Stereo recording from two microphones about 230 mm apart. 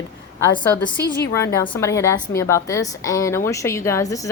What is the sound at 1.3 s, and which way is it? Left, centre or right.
A woman's voice, centre.